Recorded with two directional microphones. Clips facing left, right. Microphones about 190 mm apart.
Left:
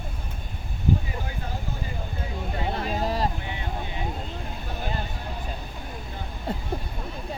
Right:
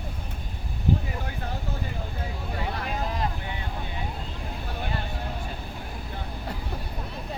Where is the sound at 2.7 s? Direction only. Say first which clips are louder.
Left 5 dB; 30° left (ahead or behind).